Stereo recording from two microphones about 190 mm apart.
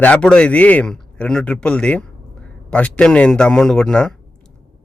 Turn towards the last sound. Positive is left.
turn(degrees=5)  # may be behind; listen again after turning